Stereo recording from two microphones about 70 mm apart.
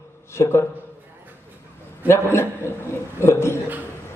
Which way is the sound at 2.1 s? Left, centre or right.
Left.